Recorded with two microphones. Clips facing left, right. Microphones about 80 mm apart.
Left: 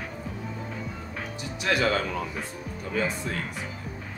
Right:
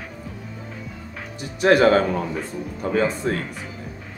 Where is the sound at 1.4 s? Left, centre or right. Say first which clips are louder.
Right 10 dB; right.